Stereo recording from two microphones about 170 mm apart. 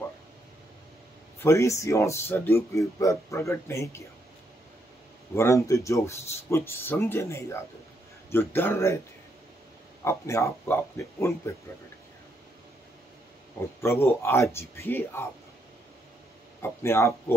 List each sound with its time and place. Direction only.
1.4 s speech: 15° left (ahead or behind)
5.3 s speech: 15° left (ahead or behind)
10.0 s speech: 15° left (ahead or behind)
13.7 s speech: 15° left (ahead or behind)
16.6 s speech: 15° left (ahead or behind)